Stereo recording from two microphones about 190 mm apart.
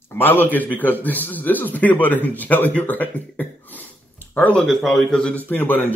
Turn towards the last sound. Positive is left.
turn(degrees=10)  # may be behind; listen again after turning